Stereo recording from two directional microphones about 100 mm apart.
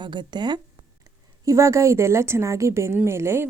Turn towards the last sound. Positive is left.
turn(degrees=-25)  # may be behind; listen again after turning